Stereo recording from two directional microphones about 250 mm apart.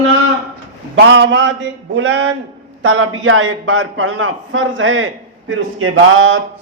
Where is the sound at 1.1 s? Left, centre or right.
Right.